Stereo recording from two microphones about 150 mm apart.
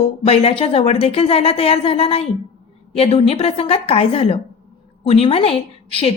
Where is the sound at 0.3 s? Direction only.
45° left (ahead or behind).